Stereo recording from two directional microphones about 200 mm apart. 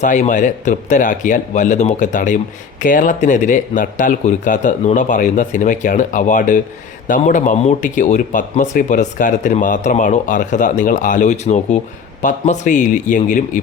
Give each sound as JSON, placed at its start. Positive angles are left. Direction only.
{"t": 0.0, "sound": "speech", "side_deg": 40}